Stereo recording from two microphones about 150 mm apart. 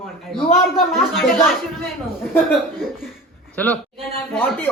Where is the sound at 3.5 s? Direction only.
10° left (ahead or behind).